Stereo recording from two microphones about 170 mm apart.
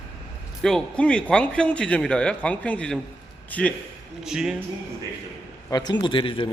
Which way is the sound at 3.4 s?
10° left (ahead or behind).